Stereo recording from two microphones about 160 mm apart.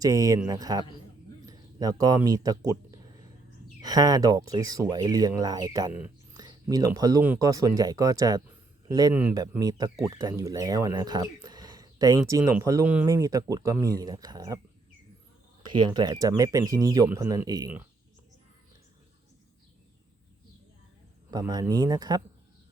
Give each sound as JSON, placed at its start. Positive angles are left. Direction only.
{"t": 0.0, "sound": "speech", "side_deg": -20}
{"t": 3.8, "sound": "speech", "side_deg": -25}
{"t": 6.3, "sound": "a sound", "side_deg": -25}
{"t": 7.3, "sound": "speech", "side_deg": -20}
{"t": 15.7, "sound": "speech", "side_deg": -30}
{"t": 21.2, "sound": "speech", "side_deg": -25}